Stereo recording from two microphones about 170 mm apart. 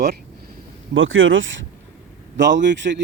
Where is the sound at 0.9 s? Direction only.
90° right.